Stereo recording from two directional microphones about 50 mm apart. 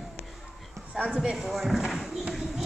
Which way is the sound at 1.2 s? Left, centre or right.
Centre.